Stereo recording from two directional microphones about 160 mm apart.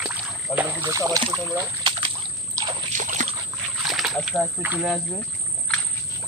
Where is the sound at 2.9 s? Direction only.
50° right (ahead or behind).